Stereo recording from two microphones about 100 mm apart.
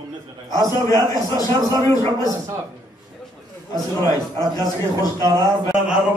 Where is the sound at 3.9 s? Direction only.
35° left (ahead or behind).